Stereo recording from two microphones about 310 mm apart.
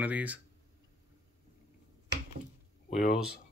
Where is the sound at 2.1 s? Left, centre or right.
Right.